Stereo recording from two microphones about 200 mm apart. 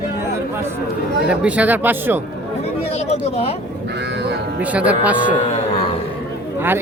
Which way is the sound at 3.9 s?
60° right (ahead or behind).